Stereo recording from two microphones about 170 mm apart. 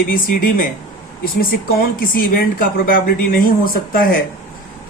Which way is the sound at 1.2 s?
60° left (ahead or behind).